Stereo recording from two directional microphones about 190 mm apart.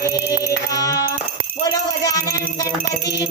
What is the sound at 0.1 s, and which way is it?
Music, 20° left (ahead or behind).